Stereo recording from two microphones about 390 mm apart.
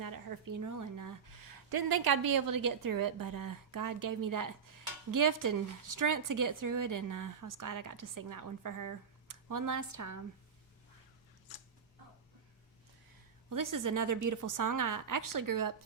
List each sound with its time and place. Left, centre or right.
0.0 s speech: right
13.5 s speech: right